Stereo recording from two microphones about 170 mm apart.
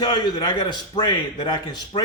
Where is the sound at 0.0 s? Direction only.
25° left (ahead or behind).